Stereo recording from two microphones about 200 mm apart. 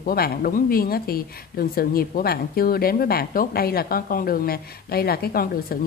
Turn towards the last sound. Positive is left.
turn(degrees=50)  # may be behind; listen again after turning